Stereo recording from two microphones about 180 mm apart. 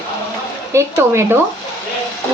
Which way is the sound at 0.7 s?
15° right (ahead or behind).